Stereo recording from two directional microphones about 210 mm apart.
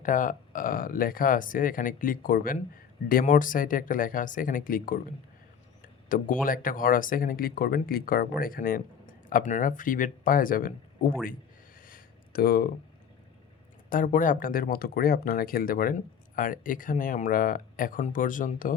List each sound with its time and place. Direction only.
0.0 s speech: 40° left (ahead or behind)
11.9 s a sound: 45° left (ahead or behind)
13.9 s speech: 40° left (ahead or behind)